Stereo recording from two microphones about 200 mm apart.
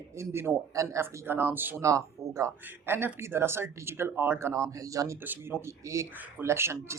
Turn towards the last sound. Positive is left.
turn(degrees=-15)  # may be behind; listen again after turning